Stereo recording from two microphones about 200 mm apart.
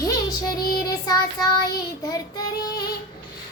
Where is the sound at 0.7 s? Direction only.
20° left (ahead or behind).